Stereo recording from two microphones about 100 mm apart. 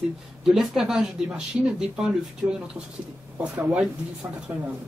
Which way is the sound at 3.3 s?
15° right (ahead or behind).